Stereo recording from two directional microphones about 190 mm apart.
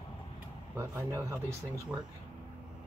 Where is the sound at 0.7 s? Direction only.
15° right (ahead or behind).